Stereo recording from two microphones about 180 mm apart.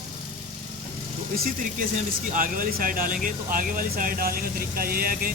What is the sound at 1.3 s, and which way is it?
Speech, 50° right (ahead or behind).